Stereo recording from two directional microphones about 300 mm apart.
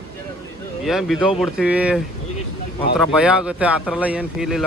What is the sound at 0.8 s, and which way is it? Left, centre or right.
Speech, centre.